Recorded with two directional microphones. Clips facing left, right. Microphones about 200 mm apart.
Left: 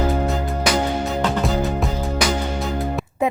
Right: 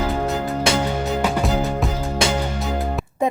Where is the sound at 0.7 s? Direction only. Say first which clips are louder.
Left 1 dB; 25° right (ahead or behind).